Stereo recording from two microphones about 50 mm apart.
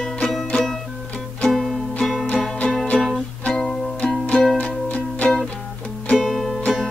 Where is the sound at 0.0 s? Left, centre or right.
Centre.